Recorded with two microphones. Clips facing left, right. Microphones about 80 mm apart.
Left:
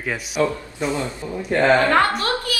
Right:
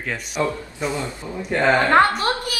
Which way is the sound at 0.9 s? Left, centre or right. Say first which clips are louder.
Left 2 dB; left.